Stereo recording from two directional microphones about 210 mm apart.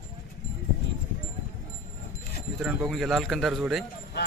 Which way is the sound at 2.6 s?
Centre (ahead or behind).